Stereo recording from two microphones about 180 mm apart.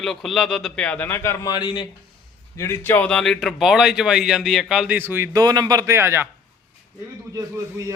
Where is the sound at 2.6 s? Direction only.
15° left (ahead or behind); by 6.2 s 15° right (ahead or behind).